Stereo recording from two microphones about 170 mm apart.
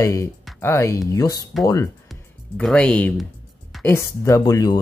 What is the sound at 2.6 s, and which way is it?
Speech, 5° left (ahead or behind).